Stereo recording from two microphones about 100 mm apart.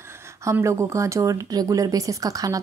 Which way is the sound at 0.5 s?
30° right (ahead or behind).